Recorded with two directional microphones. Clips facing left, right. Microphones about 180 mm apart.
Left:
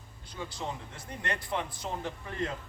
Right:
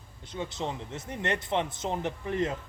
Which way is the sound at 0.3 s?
25° right (ahead or behind).